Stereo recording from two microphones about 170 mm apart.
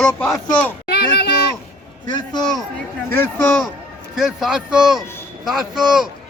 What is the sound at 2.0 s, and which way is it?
Speech, 25° left (ahead or behind).